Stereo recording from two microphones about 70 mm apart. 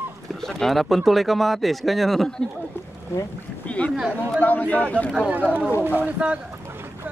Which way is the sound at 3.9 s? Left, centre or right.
Centre.